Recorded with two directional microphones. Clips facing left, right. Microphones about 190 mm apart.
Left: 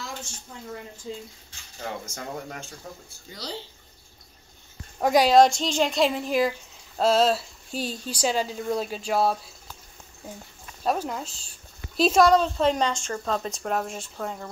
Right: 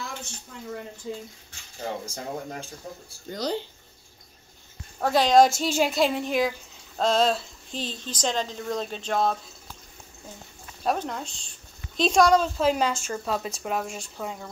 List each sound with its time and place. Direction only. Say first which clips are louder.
1.8 s speech: right 2 dB; 30° right (ahead or behind)
3.3 s speech: right 8 dB; 50° right (ahead or behind)
5.0 s speech: left 3 dB; 10° left (ahead or behind)
5.3 s a woman's voice: left 1 dB; centre (ahead or behind)
10.8 s a woman's voice: left 1 dB; 5° left (ahead or behind)